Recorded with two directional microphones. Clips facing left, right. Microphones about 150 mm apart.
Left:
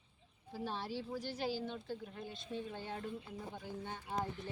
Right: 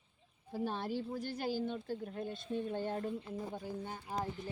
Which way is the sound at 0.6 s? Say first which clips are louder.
Right 4 dB; 50° right (ahead or behind).